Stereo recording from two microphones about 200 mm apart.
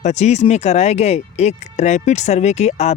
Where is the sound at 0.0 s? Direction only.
35° left (ahead or behind).